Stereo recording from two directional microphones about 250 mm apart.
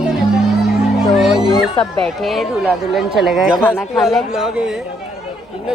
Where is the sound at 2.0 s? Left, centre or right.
Centre.